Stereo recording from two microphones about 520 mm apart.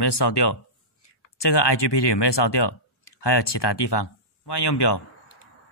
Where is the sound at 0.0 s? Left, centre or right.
Left.